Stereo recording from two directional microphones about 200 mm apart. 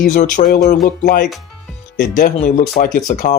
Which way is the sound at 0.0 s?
45° left (ahead or behind).